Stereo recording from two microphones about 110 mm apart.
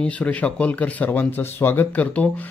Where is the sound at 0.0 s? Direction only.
15° left (ahead or behind).